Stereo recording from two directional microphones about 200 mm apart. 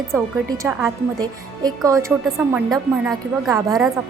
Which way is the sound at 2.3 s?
5° right (ahead or behind).